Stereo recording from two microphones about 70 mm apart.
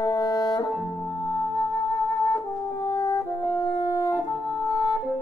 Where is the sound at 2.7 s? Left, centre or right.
Left.